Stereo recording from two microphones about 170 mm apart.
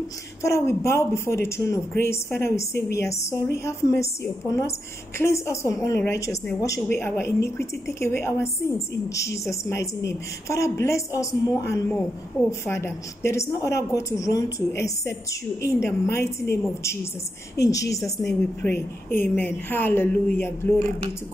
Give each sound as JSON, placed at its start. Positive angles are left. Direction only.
{"t": 0.4, "sound": "a woman's voice", "side_deg": 15}